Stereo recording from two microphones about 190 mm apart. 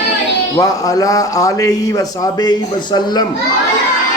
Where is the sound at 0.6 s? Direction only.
20° left (ahead or behind).